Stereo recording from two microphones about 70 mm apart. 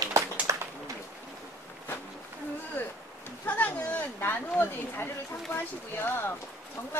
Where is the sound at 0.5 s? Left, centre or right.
Right.